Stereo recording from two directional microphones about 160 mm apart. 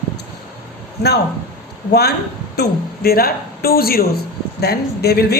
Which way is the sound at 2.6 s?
70° left (ahead or behind).